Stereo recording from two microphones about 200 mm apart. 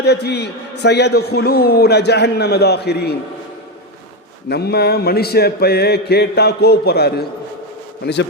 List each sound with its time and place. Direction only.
0.0 s a man's voice: 55° left (ahead or behind)
4.4 s a sound: 55° left (ahead or behind)
8.0 s a man's voice: 60° left (ahead or behind)